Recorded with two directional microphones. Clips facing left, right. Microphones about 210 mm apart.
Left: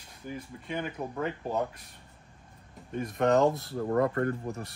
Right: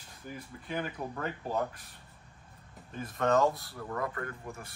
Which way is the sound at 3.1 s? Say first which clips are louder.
Left 3 dB; 20° left (ahead or behind).